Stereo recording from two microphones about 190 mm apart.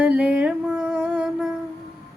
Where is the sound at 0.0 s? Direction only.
5° right (ahead or behind).